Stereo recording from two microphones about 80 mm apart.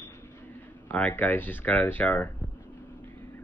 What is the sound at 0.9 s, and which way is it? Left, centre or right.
Speech, centre.